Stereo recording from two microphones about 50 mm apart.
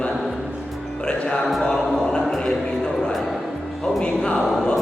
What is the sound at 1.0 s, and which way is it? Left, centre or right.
Speech, centre.